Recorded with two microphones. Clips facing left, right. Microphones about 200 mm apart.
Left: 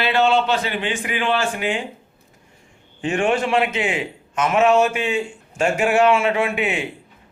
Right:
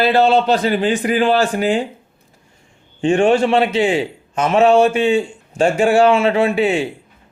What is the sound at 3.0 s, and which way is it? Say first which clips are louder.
Speech: right 7 dB; 30° right (ahead or behind).